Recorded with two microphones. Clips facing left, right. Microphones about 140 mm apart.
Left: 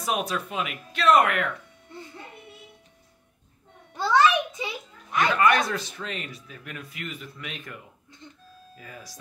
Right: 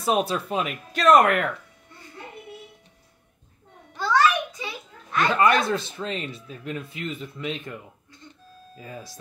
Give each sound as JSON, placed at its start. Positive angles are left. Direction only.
{"t": 0.0, "sound": "speech", "side_deg": -30}
{"t": 3.9, "sound": "music", "side_deg": 25}
{"t": 5.3, "sound": "speech", "side_deg": -25}